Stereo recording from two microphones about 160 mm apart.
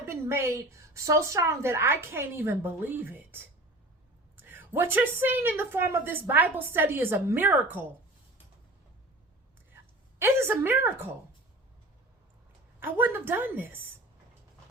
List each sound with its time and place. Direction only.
0.0 s speech: 15° right (ahead or behind)
10.2 s speech: 15° right (ahead or behind)
12.8 s speech: 15° right (ahead or behind)